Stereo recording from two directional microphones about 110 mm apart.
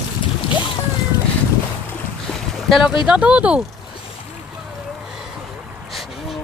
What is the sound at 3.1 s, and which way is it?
Speech, 10° right (ahead or behind).